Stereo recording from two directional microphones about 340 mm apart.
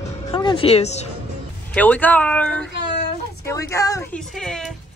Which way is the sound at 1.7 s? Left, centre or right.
Centre.